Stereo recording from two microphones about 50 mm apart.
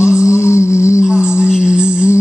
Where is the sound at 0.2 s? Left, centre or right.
Left.